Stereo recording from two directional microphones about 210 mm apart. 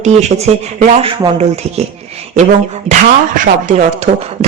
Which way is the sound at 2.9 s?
35° right (ahead or behind).